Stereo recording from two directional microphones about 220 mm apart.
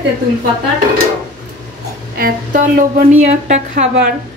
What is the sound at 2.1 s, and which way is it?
A woman's voice, 40° right (ahead or behind).